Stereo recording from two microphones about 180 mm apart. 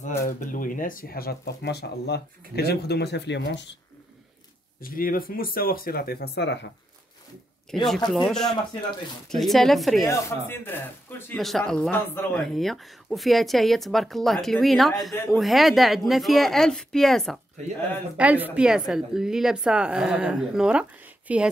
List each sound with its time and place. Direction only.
0.2 s speech: 50° left (ahead or behind); by 3.6 s 75° left (ahead or behind)
4.7 s speech: 50° left (ahead or behind); by 6.7 s 75° left (ahead or behind)
7.8 s speech: centre (ahead or behind)
10.0 s speech: 10° left (ahead or behind); by 21.5 s 5° right (ahead or behind)